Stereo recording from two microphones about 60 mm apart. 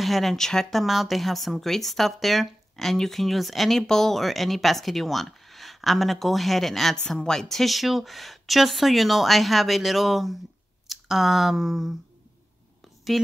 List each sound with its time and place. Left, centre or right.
0.0 s speech: centre
13.1 s a woman's voice: centre